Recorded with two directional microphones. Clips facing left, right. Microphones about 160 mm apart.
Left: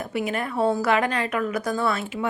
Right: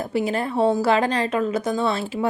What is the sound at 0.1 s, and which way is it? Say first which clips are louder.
A woman's voice: right 3 dB; 30° right (ahead or behind).